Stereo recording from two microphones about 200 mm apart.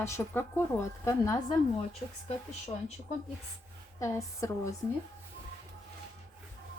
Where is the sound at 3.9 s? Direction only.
15° left (ahead or behind).